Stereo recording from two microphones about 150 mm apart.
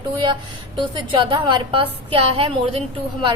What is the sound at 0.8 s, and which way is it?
A woman's voice, 35° right (ahead or behind).